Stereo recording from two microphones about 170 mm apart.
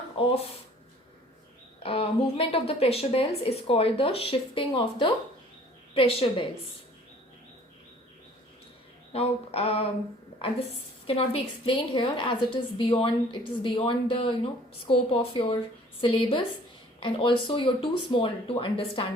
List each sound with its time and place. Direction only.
0.2 s a woman's voice: 35° left (ahead or behind)
1.8 s a woman's voice: 35° left (ahead or behind)
9.1 s a woman's voice: 35° left (ahead or behind)
11.0 s a woman's voice: 35° left (ahead or behind)